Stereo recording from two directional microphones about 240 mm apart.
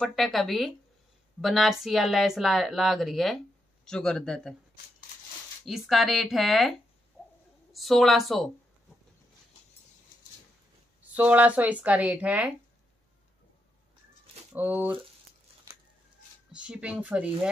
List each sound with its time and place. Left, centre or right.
0.0 s speech: centre
5.7 s speech: centre
7.2 s a sound: centre
7.7 s speech: centre
11.0 s speech: centre
14.5 s speech: centre
16.5 s speech: centre